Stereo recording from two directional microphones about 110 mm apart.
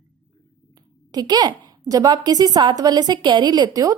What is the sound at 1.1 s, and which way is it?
A woman's voice, 35° right (ahead or behind).